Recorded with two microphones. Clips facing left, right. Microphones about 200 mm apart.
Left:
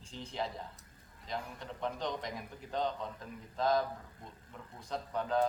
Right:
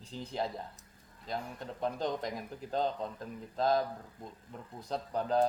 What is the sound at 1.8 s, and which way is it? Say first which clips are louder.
A man's voice: right 4 dB; 35° right (ahead or behind).